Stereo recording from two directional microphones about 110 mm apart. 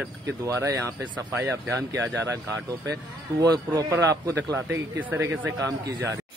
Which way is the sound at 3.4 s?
35° right (ahead or behind).